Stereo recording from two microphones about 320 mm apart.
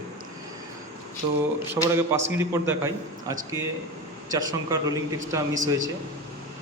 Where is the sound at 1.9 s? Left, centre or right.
Centre.